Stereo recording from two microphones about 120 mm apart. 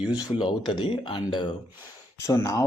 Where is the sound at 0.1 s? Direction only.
40° left (ahead or behind).